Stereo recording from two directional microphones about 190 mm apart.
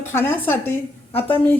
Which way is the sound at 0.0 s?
10° left (ahead or behind).